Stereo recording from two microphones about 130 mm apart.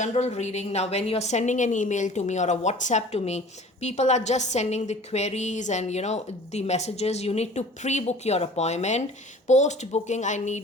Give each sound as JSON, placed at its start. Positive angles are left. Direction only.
{"t": 0.0, "sound": "a woman's voice", "side_deg": 60}